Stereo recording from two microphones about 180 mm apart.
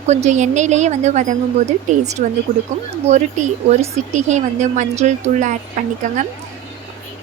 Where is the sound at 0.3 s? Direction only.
40° right (ahead or behind).